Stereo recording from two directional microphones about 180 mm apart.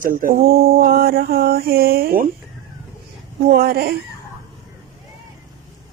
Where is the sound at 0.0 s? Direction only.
50° right (ahead or behind).